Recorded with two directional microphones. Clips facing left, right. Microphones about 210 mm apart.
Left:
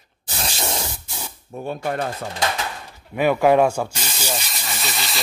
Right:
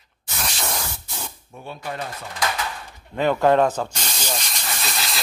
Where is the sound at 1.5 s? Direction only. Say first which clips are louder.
Left 7 dB; 45° left (ahead or behind).